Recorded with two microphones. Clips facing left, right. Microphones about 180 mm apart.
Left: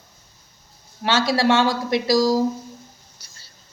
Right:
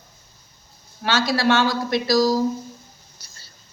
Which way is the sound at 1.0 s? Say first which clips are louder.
Left 1 dB; 25° left (ahead or behind).